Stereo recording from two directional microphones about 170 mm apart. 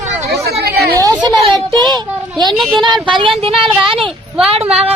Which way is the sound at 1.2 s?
25° right (ahead or behind).